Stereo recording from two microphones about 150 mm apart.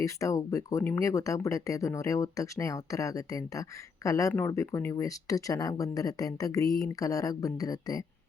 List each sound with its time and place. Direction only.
0.0 s speech: 20° left (ahead or behind)